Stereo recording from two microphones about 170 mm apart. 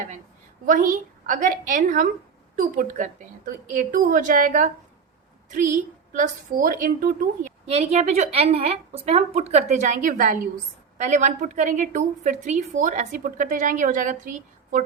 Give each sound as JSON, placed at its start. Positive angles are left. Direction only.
{"t": 0.6, "sound": "a woman's voice", "side_deg": -50}